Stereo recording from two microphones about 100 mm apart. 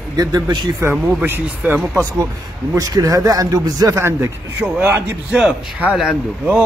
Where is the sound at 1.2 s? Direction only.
20° right (ahead or behind).